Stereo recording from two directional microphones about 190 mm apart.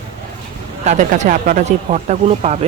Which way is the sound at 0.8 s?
40° right (ahead or behind).